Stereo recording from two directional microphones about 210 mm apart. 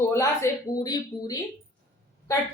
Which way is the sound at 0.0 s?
15° left (ahead or behind).